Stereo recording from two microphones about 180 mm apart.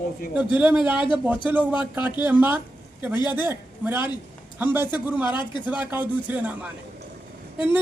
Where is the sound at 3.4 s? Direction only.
10° right (ahead or behind).